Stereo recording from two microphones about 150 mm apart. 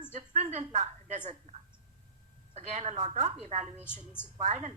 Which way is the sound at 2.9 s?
45° right (ahead or behind).